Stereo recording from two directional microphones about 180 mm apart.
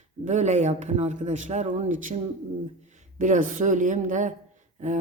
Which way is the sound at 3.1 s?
45° right (ahead or behind).